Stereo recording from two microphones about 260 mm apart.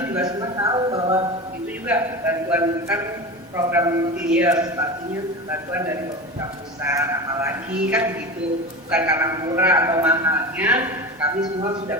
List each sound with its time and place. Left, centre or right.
0.0 s a man's voice: centre